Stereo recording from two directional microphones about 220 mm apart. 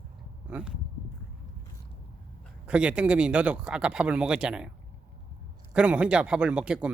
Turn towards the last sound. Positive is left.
turn(degrees=-5)  # may be behind; listen again after turning